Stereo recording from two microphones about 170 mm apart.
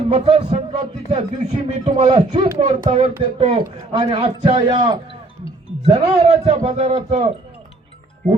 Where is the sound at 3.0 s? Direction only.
30° right (ahead or behind).